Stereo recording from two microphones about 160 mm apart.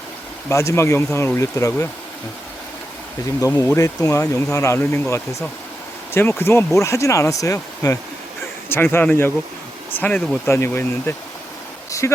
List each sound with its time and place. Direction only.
0.4 s speech: 20° left (ahead or behind)
3.4 s speech: 20° left (ahead or behind)
11.9 s vehicle: 20° left (ahead or behind)